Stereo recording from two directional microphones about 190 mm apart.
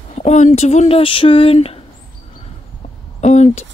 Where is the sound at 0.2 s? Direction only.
35° left (ahead or behind).